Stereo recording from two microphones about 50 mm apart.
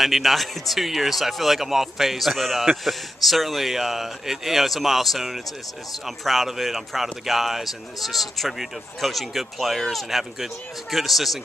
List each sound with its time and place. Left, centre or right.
0.0 s speech: centre